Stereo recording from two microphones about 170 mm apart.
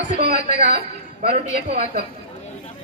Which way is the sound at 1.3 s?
35° right (ahead or behind).